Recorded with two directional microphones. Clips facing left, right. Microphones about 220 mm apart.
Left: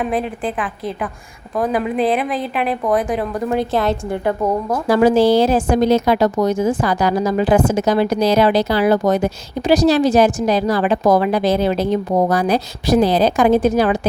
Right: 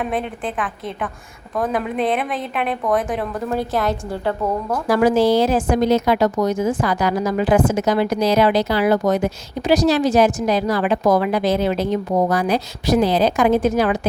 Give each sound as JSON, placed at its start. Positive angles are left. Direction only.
{"t": 0.0, "sound": "a woman's voice", "side_deg": 0}
{"t": 3.5, "sound": "a woman's voice", "side_deg": 25}
{"t": 4.3, "sound": "speech", "side_deg": 15}
{"t": 4.9, "sound": "a woman's voice", "side_deg": 25}